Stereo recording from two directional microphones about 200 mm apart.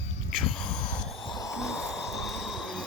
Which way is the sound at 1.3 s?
20° left (ahead or behind).